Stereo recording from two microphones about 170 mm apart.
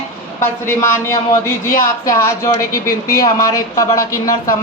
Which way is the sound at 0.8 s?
15° left (ahead or behind).